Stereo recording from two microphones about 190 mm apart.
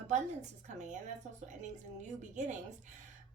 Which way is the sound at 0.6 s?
40° right (ahead or behind).